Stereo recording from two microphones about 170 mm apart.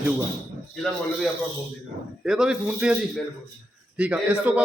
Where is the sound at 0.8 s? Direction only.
5° left (ahead or behind).